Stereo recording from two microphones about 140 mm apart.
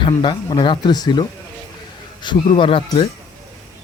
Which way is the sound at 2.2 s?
35° left (ahead or behind).